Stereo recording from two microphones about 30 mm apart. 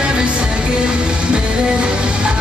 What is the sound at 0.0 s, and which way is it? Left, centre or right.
Music, right.